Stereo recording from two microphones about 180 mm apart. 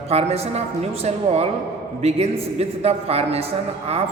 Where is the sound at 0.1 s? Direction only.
35° right (ahead or behind).